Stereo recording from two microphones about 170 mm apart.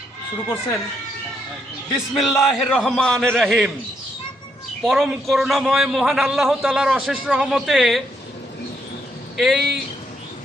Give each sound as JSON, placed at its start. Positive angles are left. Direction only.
{"t": 0.4, "sound": "a man's voice", "side_deg": 15}
{"t": 2.3, "sound": "a man's voice", "side_deg": 15}
{"t": 2.7, "sound": "a man's voice", "side_deg": 0}
{"t": 4.9, "sound": "a man's voice", "side_deg": 0}
{"t": 9.4, "sound": "a man's voice", "side_deg": 0}